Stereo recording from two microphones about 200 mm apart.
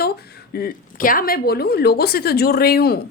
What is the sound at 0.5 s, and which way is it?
A woman's voice, 45° left (ahead or behind).